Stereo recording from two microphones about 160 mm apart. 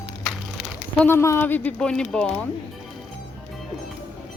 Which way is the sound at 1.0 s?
15° left (ahead or behind).